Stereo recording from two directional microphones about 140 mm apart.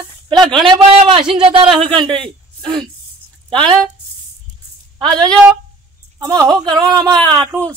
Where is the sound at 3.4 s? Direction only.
40° right (ahead or behind).